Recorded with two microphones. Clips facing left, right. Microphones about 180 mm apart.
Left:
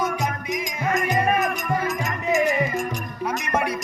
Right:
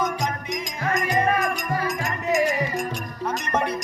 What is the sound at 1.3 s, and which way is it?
Music, 20° left (ahead or behind).